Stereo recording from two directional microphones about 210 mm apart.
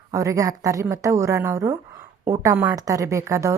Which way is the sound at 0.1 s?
15° right (ahead or behind).